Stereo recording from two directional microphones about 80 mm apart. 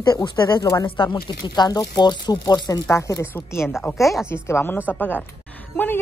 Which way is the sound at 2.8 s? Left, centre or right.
Left.